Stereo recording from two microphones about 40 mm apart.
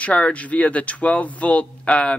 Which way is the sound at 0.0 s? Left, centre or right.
Left.